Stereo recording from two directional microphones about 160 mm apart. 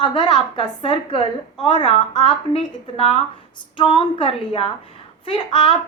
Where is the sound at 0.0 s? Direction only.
30° left (ahead or behind).